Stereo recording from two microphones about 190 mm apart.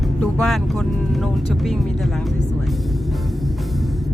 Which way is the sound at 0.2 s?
Centre (ahead or behind).